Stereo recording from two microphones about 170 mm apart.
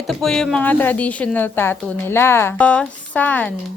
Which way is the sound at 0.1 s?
5° left (ahead or behind).